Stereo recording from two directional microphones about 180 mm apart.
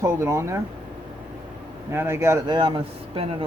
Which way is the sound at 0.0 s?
15° right (ahead or behind).